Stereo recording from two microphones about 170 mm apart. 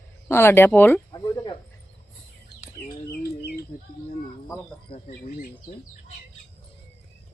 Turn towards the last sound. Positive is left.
turn(degrees=50)  # may be behind; listen again after turning